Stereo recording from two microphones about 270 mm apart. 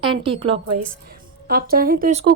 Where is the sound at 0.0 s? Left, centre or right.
Centre.